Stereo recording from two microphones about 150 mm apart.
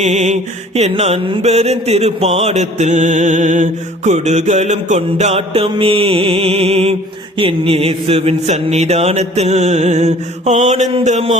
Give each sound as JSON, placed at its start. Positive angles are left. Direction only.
{"t": 0.0, "sound": "mantra", "side_deg": -50}